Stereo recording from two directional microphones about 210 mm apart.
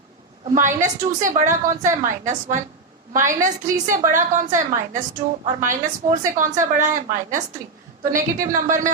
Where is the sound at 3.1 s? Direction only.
40° right (ahead or behind).